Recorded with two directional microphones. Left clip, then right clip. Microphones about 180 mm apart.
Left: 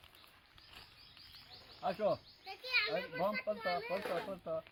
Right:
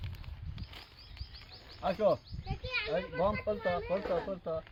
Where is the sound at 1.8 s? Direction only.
25° right (ahead or behind).